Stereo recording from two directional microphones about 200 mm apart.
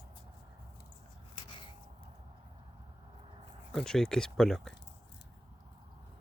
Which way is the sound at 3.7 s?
Centre (ahead or behind).